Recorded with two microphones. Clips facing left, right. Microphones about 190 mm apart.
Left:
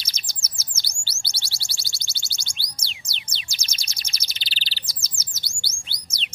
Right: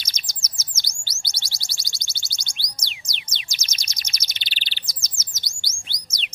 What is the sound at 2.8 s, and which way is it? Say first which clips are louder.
Chirp: right 1 dB; 30° left (ahead or behind).